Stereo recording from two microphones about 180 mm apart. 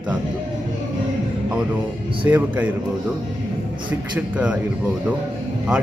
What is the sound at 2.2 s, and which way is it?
Speech, 15° right (ahead or behind).